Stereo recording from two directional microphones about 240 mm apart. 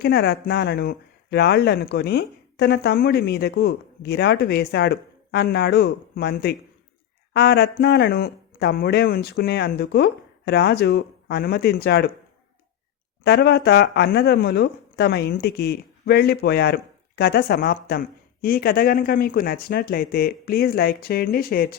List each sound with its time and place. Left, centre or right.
0.0 s speech: left
13.2 s speech: left